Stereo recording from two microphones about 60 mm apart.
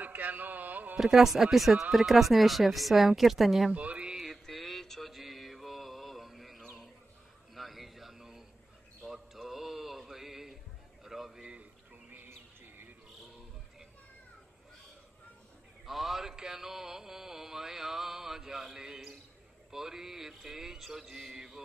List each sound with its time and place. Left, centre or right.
0.0 s carnatic music: right
0.9 s speech: centre
3.7 s speech: right
4.2 s mantra: centre
7.5 s a sound: centre
12.6 s bird: right
15.8 s mantra: centre
18.7 s a sound: centre
19.7 s mantra: centre